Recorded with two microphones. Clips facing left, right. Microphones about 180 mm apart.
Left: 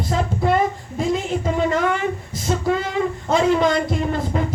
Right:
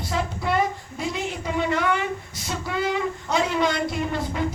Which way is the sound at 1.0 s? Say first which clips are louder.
Left 7 dB; 45° left (ahead or behind).